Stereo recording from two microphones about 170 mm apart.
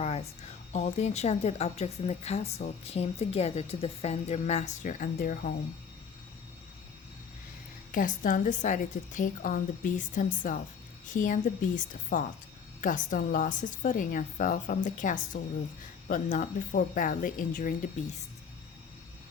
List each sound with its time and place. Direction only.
0.0 s a sound: 40° left (ahead or behind)
0.7 s speech: 40° left (ahead or behind)
7.9 s a woman's voice: 50° left (ahead or behind)